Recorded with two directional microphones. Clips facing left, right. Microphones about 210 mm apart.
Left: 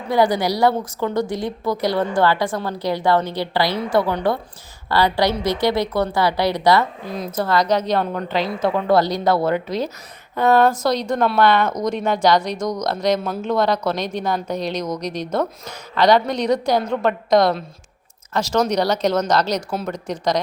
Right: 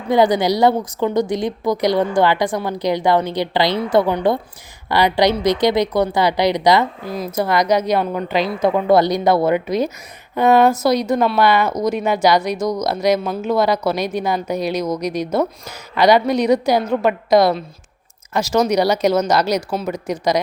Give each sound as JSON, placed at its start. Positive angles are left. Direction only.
{"t": 0.1, "sound": "a woman's voice", "side_deg": -20}